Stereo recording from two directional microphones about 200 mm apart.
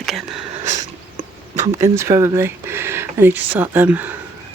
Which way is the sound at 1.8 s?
15° right (ahead or behind).